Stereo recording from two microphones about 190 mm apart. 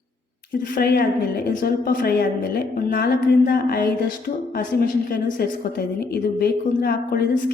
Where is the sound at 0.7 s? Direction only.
55° left (ahead or behind).